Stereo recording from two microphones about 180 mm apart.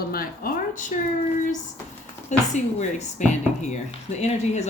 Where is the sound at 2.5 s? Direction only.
40° left (ahead or behind).